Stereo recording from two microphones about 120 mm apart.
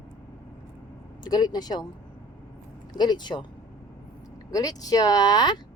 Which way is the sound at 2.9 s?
35° left (ahead or behind).